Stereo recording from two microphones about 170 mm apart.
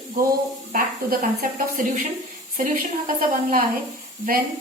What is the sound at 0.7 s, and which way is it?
Speech, 55° right (ahead or behind).